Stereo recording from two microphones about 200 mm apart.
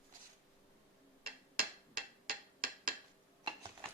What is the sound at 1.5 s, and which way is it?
Hammer, 45° right (ahead or behind).